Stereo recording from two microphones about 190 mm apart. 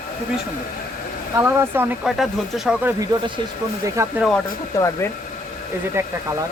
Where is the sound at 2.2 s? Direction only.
Centre (ahead or behind).